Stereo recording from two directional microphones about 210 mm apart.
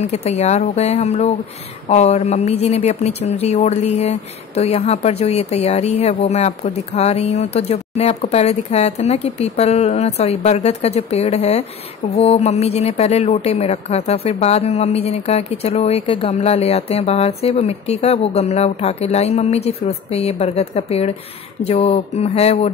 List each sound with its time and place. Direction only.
0.1 s speech: 30° left (ahead or behind)